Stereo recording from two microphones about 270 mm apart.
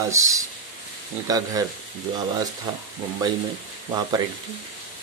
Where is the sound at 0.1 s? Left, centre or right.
Centre.